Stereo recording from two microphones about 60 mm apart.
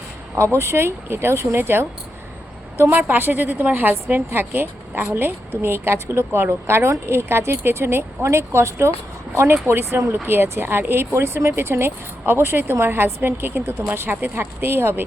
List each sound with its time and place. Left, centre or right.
0.6 s speech: right
2.9 s a woman's voice: right
11.1 s a woman's voice: right